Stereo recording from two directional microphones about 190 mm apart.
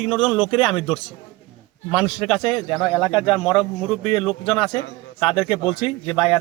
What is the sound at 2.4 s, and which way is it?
Speech, 25° left (ahead or behind).